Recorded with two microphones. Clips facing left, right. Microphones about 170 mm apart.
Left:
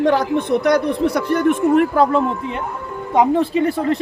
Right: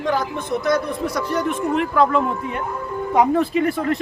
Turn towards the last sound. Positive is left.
turn(degrees=30)  # may be behind; listen again after turning